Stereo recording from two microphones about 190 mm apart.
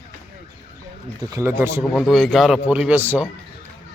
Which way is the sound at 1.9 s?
Centre (ahead or behind).